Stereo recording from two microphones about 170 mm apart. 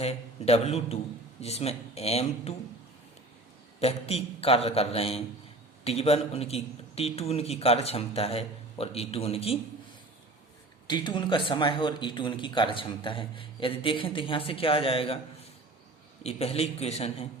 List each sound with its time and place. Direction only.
0.0 s a man's voice: 40° left (ahead or behind)
3.8 s a man's voice: 35° left (ahead or behind)
10.8 s speech: 25° left (ahead or behind)
16.2 s a man's voice: 35° left (ahead or behind)